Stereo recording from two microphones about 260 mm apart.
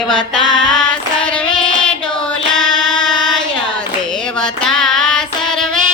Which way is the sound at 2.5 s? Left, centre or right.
Centre.